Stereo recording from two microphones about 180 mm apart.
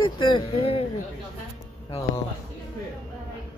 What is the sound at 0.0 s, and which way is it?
Speech, 25° left (ahead or behind).